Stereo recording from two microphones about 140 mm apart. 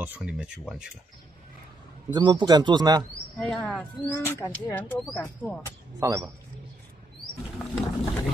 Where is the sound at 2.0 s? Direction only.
35° right (ahead or behind).